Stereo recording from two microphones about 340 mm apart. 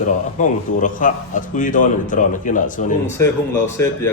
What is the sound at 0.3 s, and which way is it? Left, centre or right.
A man's voice, left.